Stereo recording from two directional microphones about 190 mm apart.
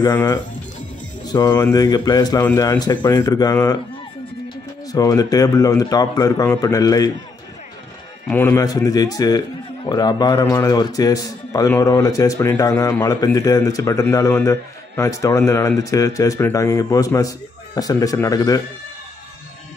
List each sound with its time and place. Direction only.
0.0 s a man's voice: 15° left (ahead or behind)
4.9 s speech: 20° left (ahead or behind)
8.3 s a man's voice: 10° left (ahead or behind)